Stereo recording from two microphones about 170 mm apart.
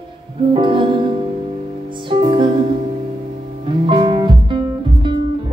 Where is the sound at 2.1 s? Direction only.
30° right (ahead or behind).